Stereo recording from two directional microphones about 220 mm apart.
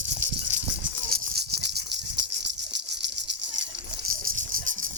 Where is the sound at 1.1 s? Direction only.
45° right (ahead or behind).